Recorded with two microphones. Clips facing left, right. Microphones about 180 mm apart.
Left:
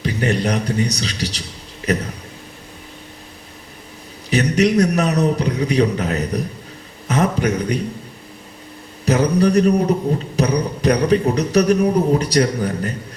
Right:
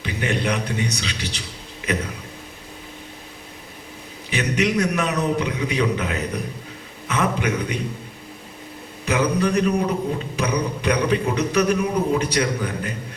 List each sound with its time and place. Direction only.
0.0 s a man's voice: 40° left (ahead or behind)
4.3 s a man's voice: 40° left (ahead or behind)
7.1 s a sound: 40° left (ahead or behind)
9.0 s a man's voice: 40° left (ahead or behind)